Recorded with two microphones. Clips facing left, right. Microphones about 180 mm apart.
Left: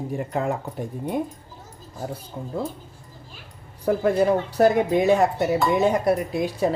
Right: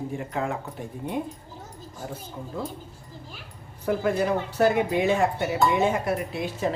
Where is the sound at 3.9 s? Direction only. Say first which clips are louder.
Left 4 dB; 35° left (ahead or behind).